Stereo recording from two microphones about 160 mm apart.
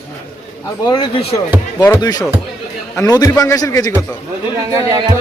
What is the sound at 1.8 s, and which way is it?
A man's voice, 20° left (ahead or behind).